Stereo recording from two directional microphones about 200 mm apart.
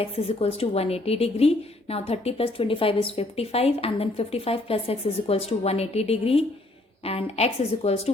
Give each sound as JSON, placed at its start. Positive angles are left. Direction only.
{"t": 0.0, "sound": "a woman's voice", "side_deg": 30}